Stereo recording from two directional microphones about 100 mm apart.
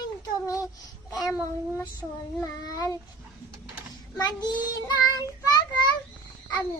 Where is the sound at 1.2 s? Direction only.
Centre (ahead or behind).